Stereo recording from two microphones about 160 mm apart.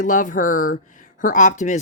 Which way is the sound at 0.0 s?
55° left (ahead or behind).